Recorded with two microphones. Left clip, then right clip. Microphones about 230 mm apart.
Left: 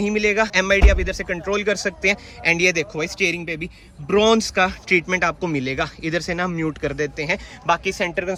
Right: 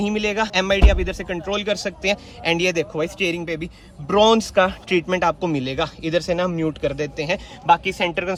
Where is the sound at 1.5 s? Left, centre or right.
Left.